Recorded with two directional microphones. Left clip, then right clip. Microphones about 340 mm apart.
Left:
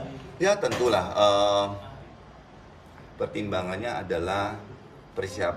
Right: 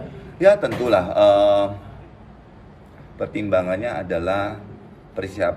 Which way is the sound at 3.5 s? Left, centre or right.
Centre.